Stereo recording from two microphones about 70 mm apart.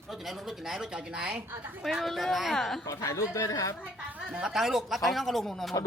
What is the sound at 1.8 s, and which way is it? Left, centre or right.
Speech, centre.